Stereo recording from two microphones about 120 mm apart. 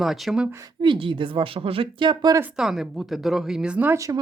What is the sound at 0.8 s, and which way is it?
Speech, 45° right (ahead or behind).